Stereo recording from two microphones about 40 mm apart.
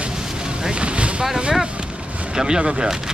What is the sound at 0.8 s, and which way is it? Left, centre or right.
Speech, right.